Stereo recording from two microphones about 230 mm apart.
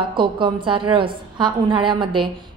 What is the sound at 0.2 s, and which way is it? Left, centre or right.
A woman's voice, right.